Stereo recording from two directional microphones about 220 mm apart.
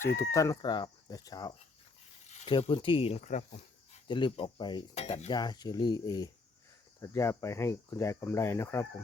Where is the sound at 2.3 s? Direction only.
25° left (ahead or behind).